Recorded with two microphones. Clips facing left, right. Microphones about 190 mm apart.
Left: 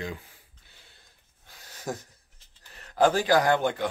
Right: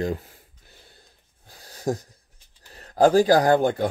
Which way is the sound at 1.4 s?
35° right (ahead or behind).